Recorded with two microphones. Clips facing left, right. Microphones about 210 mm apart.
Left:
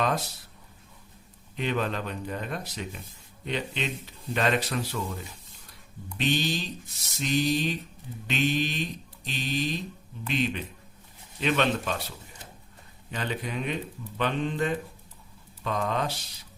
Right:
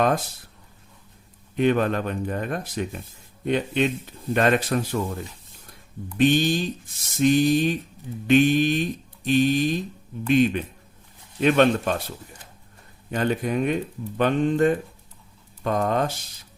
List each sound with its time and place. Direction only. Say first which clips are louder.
1.5 s speech: right 8 dB; 50° right (ahead or behind)
6.1 s speech: right 8 dB; 50° right (ahead or behind)
13.1 s speech: right 9 dB; 50° right (ahead or behind)